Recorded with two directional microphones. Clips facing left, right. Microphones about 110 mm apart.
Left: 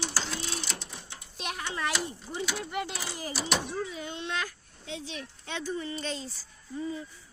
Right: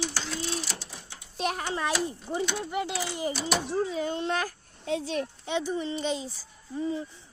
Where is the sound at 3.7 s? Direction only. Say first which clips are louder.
Right 7 dB; 35° right (ahead or behind).